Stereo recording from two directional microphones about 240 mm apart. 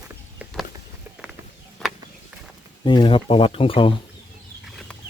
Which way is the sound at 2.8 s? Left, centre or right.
Centre.